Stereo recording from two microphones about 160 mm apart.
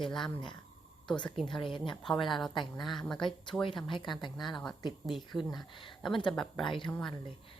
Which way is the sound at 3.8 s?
30° left (ahead or behind).